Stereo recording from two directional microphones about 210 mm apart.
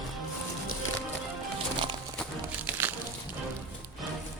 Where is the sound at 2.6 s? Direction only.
10° right (ahead or behind).